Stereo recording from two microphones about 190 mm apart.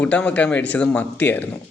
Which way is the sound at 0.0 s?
5° left (ahead or behind).